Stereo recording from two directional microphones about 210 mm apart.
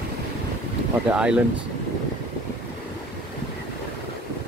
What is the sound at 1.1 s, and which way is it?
Speech, 5° right (ahead or behind).